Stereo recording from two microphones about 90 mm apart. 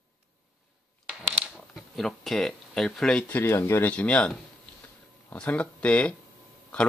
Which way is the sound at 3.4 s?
30° left (ahead or behind).